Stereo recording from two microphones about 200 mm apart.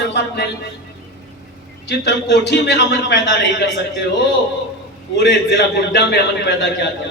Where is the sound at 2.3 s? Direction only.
55° left (ahead or behind).